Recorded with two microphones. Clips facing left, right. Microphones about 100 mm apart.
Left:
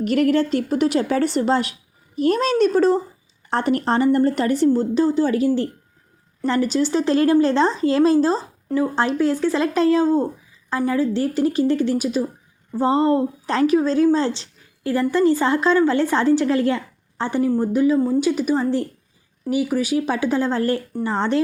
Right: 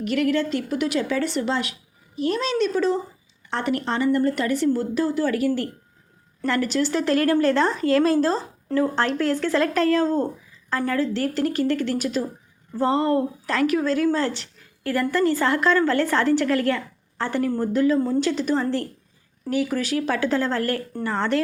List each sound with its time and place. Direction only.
0.0 s a woman's voice: 40° left (ahead or behind); by 21.4 s 20° left (ahead or behind)